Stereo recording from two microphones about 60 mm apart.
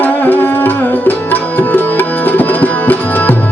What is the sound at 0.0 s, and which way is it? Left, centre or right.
Music, left.